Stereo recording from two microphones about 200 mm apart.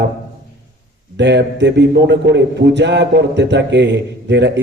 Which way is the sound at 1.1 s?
60° right (ahead or behind).